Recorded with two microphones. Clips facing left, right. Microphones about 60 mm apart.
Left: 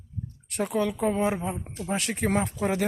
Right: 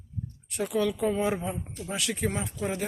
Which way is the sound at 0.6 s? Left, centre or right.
Left.